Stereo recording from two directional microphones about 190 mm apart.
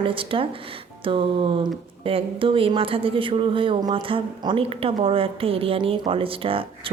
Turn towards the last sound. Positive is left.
turn(degrees=-30)  # may be behind; listen again after turning